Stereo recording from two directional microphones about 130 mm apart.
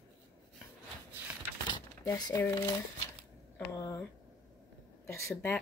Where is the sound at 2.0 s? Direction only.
30° left (ahead or behind).